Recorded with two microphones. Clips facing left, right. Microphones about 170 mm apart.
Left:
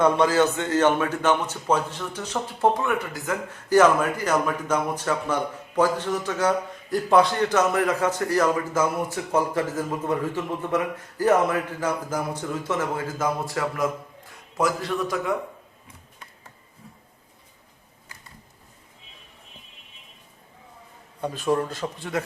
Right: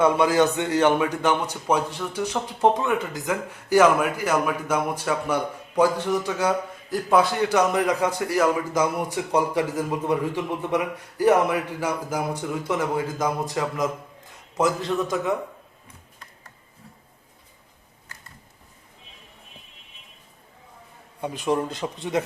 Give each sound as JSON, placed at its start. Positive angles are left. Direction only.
{"t": 0.0, "sound": "a man's voice", "side_deg": -10}
{"t": 21.2, "sound": "a man's voice", "side_deg": -15}